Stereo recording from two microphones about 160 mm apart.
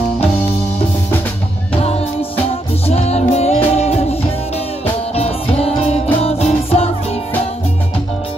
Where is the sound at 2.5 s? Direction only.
40° left (ahead or behind).